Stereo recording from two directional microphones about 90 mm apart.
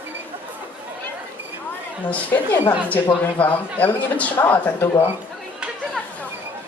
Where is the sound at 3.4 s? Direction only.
15° left (ahead or behind).